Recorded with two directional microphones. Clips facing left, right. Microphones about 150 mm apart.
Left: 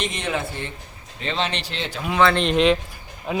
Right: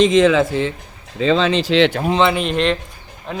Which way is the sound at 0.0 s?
90° right.